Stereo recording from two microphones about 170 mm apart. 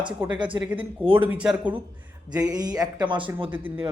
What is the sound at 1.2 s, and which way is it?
Speech, 5° right (ahead or behind).